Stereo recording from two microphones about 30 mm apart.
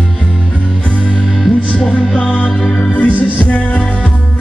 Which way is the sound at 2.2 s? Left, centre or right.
Left.